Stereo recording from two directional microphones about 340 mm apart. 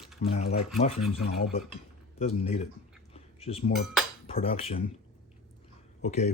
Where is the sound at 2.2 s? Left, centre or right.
Centre.